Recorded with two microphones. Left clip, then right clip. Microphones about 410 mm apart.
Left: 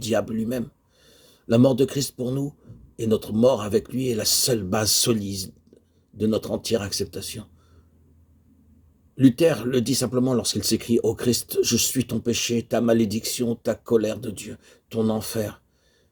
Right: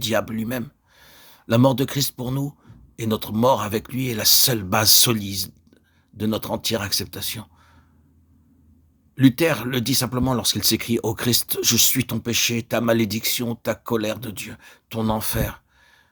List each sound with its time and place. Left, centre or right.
0.0 s speech: right
9.1 s speech: right